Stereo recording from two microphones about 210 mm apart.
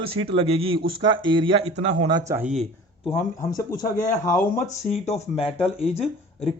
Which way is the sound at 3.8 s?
40° left (ahead or behind).